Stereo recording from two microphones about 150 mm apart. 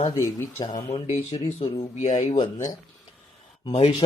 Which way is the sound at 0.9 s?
40° left (ahead or behind).